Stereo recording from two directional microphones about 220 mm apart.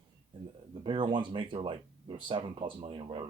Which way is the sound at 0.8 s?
25° right (ahead or behind).